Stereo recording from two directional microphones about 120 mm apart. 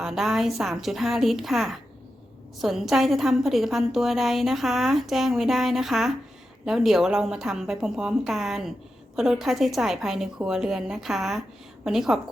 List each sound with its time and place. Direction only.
0.0 s a woman's voice: 5° right (ahead or behind)